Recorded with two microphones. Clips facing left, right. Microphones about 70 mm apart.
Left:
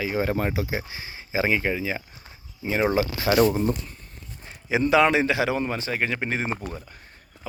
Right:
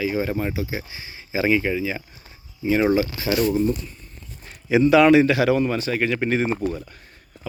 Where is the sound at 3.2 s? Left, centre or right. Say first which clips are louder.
Left 2 dB; left.